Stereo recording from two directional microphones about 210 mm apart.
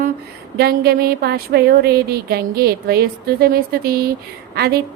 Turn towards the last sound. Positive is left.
turn(degrees=-50)  # may be behind; listen again after turning